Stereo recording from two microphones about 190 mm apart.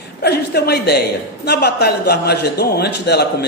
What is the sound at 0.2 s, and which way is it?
A man's voice, 60° left (ahead or behind).